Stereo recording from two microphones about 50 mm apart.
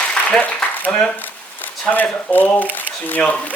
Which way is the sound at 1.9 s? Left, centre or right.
Left.